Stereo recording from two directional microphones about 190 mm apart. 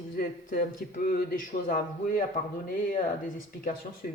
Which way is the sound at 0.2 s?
45° left (ahead or behind).